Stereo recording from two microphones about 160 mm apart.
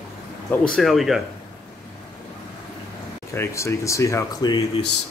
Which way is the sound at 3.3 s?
15° left (ahead or behind).